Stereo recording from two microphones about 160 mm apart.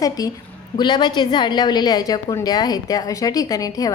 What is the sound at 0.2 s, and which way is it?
A woman's voice, 20° left (ahead or behind).